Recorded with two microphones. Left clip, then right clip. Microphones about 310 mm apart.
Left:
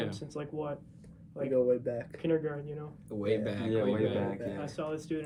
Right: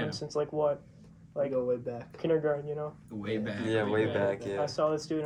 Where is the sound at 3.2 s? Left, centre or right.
Centre.